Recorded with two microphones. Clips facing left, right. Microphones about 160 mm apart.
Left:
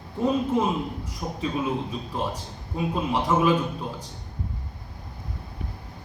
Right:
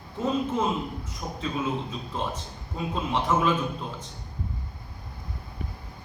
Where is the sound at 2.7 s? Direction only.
10° left (ahead or behind).